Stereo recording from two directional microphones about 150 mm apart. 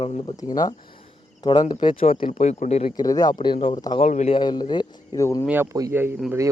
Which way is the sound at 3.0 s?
25° left (ahead or behind).